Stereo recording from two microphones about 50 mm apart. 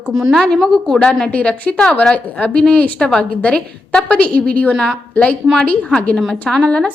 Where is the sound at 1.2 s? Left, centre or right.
Left.